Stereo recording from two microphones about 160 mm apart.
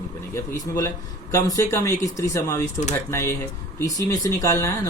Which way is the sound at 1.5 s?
20° left (ahead or behind).